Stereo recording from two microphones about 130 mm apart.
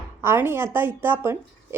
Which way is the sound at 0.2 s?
20° right (ahead or behind).